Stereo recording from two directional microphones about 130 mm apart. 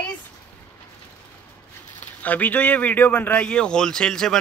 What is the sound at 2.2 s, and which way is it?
A man's voice, 10° left (ahead or behind).